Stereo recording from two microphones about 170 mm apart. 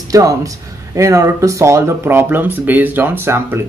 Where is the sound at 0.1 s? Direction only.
20° right (ahead or behind).